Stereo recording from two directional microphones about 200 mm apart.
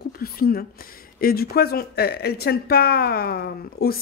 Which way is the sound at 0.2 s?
50° left (ahead or behind).